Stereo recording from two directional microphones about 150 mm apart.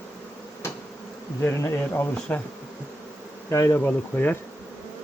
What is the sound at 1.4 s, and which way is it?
Speech, 15° left (ahead or behind).